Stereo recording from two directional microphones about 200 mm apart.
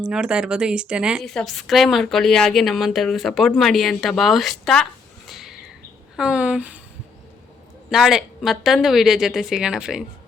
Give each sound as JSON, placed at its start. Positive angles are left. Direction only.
{"t": 0.0, "sound": "a woman's voice", "side_deg": -5}
{"t": 7.9, "sound": "a woman's voice", "side_deg": 0}